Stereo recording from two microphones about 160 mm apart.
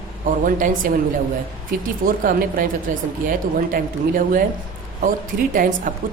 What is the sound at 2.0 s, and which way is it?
A woman's voice, 60° right (ahead or behind).